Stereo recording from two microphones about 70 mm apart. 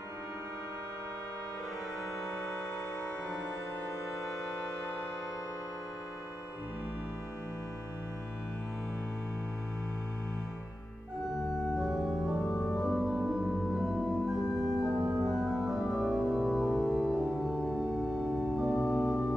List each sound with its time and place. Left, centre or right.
11.5 s organ: centre
12.4 s organ: centre
15.0 s organ: right
15.2 s organ: centre